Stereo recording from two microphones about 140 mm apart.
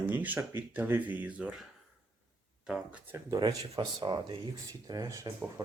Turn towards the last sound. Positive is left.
turn(degrees=-20)  # may be behind; listen again after turning